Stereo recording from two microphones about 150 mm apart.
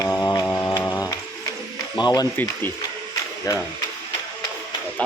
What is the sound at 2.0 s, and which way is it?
Speech, 30° left (ahead or behind).